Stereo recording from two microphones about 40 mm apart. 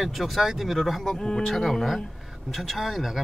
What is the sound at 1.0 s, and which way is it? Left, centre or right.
Speech, centre.